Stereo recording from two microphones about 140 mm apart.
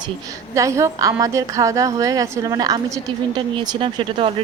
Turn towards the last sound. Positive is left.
turn(degrees=-40)  # may be behind; listen again after turning